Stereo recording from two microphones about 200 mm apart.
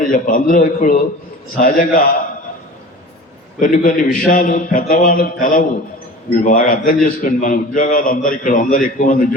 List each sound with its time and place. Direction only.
0.0 s a man's voice: 40° left (ahead or behind)
3.6 s a man's voice: 40° left (ahead or behind)